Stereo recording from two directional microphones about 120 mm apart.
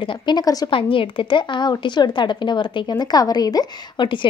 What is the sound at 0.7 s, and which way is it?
A woman's voice, 45° left (ahead or behind).